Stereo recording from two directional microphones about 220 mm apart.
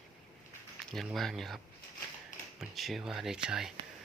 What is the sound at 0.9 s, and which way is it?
Speech, centre (ahead or behind).